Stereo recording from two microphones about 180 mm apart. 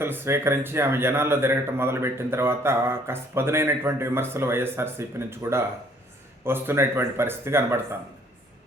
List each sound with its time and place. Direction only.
0.0 s a man's voice: 15° right (ahead or behind)